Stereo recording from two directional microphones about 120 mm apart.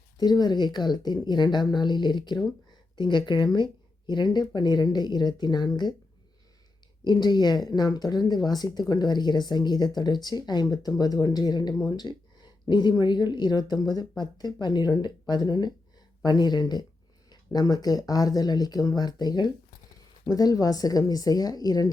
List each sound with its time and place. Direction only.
0.2 s speech: 35° left (ahead or behind)
7.0 s speech: 35° left (ahead or behind)